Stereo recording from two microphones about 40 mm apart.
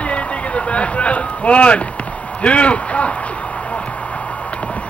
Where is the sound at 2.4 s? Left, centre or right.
Left.